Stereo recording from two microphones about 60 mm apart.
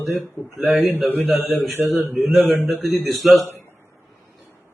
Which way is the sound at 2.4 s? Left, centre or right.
Right.